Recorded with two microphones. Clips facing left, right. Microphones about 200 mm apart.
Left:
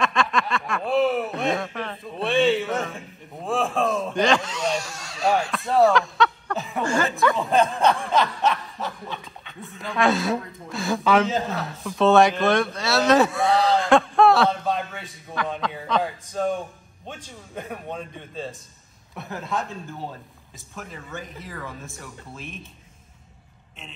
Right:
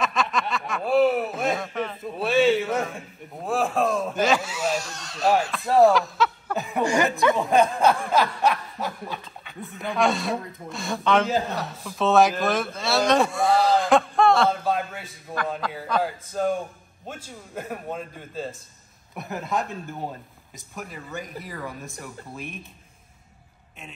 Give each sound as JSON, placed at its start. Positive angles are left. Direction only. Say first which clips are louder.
{"t": 0.0, "sound": "a sound", "louder": "left 2 dB", "side_deg": -5}
{"t": 6.8, "sound": "snicker", "louder": "right 1 dB", "side_deg": -15}
{"t": 7.6, "sound": "a sound", "louder": "even", "side_deg": 0}
{"t": 8.8, "sound": "dog", "louder": "right 2 dB", "side_deg": -5}
{"t": 19.5, "sound": "speech", "louder": "right 1 dB", "side_deg": -15}
{"t": 21.8, "sound": "speech", "louder": "right 2 dB", "side_deg": 0}